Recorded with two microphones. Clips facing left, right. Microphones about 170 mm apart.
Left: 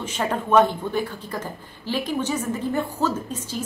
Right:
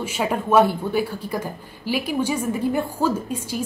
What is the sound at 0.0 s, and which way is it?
A man's voice, 10° right (ahead or behind).